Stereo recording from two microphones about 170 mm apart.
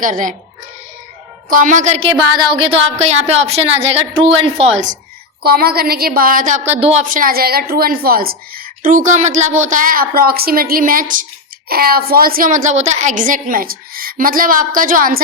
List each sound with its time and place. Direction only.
0.0 s a woman's voice: 50° right (ahead or behind)
1.5 s a woman's voice: 50° right (ahead or behind)
2.0 s a woman's voice: 30° right (ahead or behind)
5.4 s a woman's voice: 65° right (ahead or behind)
6.7 s a woman's voice: 40° right (ahead or behind); by 15.2 s 55° right (ahead or behind)